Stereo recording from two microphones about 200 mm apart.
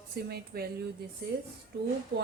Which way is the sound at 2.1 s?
60° right (ahead or behind).